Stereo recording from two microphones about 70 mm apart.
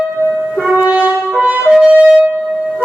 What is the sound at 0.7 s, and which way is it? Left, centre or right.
Brass instrument, centre.